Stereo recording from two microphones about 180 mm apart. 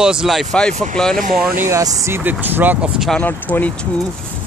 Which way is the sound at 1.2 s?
55° right (ahead or behind).